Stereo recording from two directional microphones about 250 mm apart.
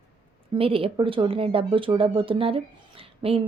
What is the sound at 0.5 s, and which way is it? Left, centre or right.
A woman's voice, right.